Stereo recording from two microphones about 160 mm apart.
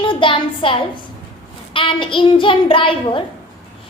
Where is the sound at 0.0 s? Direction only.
30° left (ahead or behind).